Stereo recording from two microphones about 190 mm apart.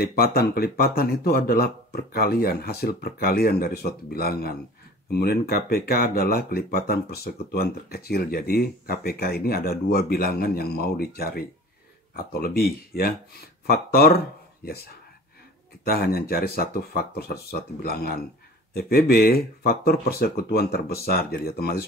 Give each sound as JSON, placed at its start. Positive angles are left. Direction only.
{"t": 0.0, "sound": "speech", "side_deg": 55}
{"t": 15.8, "sound": "speech", "side_deg": 55}